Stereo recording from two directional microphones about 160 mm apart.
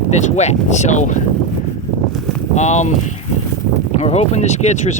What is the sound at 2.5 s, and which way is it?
Speech, 45° left (ahead or behind).